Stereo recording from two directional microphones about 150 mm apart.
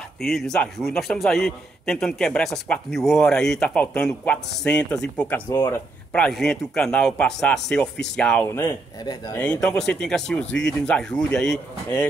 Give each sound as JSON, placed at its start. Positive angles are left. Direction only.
{"t": 0.2, "sound": "a man's voice", "side_deg": 0}
{"t": 8.5, "sound": "speech", "side_deg": 15}
{"t": 9.5, "sound": "a man's voice", "side_deg": 5}